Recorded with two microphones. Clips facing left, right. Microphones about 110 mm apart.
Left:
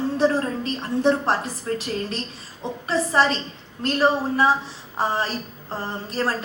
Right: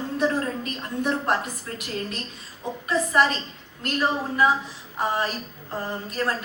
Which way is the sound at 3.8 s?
30° left (ahead or behind).